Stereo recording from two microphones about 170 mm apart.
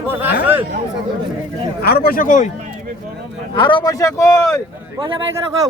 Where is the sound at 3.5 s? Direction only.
30° left (ahead or behind).